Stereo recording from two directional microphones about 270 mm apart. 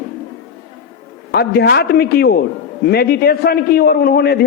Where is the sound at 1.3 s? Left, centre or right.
Left.